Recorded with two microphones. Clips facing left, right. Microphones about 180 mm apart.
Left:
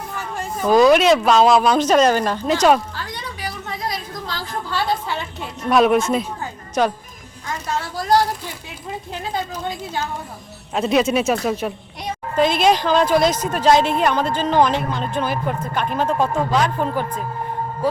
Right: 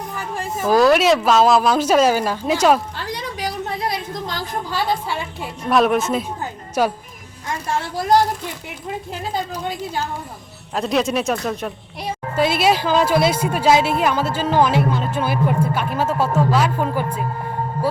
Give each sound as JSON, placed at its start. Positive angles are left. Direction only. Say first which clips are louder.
{"t": 0.2, "sound": "speech", "louder": "even", "side_deg": -5}
{"t": 4.1, "sound": "a sound", "louder": "right 2 dB", "side_deg": -20}
{"t": 5.0, "sound": "a child's voice", "louder": "right 1 dB", "side_deg": -10}
{"t": 7.8, "sound": "speech", "louder": "right 1 dB", "side_deg": -25}
{"t": 9.3, "sound": "a child's voice", "louder": "right 1 dB", "side_deg": -10}
{"t": 10.8, "sound": "a child's voice", "louder": "left 2 dB", "side_deg": 0}